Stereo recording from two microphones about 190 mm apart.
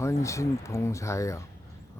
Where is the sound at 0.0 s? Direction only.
15° left (ahead or behind).